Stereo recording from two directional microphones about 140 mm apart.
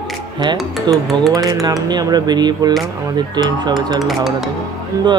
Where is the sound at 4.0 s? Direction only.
Centre (ahead or behind).